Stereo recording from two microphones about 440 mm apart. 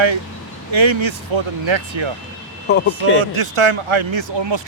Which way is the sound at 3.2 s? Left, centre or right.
Right.